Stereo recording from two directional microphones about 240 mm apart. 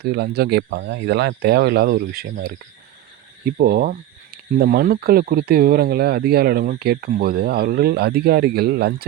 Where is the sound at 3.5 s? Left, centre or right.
Right.